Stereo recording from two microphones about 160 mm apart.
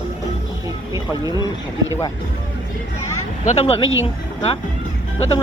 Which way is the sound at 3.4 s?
40° left (ahead or behind).